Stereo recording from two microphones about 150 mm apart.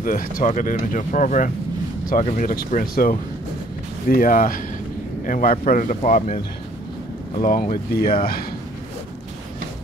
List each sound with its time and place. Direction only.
0.0 s speech: 65° left (ahead or behind)
7.3 s speech: 70° left (ahead or behind)
7.7 s speech: 80° left